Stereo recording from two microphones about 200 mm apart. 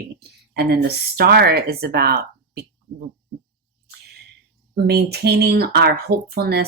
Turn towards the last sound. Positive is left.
turn(degrees=-55)  # may be behind; listen again after turning